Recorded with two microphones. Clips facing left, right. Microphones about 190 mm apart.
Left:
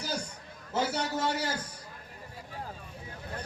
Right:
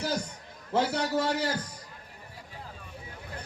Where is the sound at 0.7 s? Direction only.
60° right (ahead or behind).